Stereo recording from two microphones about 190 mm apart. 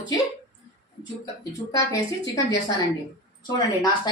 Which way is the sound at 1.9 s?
20° left (ahead or behind).